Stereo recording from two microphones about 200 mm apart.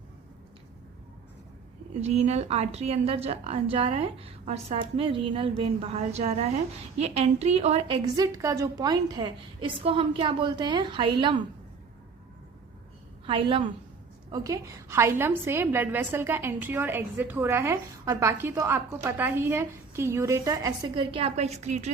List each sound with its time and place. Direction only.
2.0 s a woman's voice: 35° right (ahead or behind)
13.2 s a woman's voice: 25° right (ahead or behind)